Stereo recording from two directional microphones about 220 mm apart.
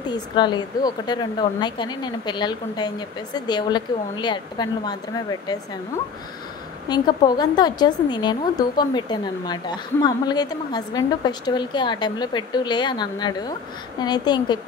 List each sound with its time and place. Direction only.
0.1 s a woman's voice: 20° left (ahead or behind)
6.9 s a woman's voice: 20° left (ahead or behind)